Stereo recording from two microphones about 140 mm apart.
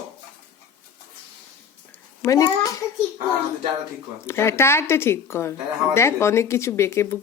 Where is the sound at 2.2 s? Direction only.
25° left (ahead or behind).